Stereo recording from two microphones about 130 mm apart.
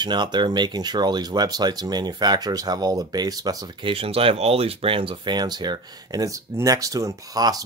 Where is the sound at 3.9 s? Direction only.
45° right (ahead or behind).